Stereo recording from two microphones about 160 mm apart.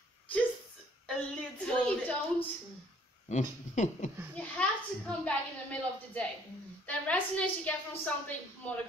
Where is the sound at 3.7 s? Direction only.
50° left (ahead or behind).